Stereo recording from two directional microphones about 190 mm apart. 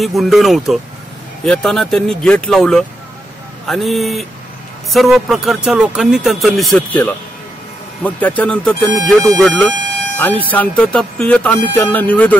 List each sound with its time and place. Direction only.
0.0 s speech: centre (ahead or behind)